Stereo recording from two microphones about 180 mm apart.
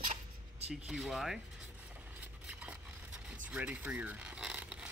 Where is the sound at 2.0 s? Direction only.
10° right (ahead or behind).